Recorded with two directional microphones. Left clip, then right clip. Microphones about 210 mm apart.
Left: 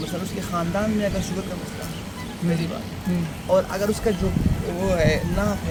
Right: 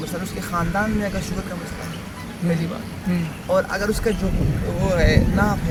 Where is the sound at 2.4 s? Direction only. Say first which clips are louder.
Right 2 dB; 45° right (ahead or behind).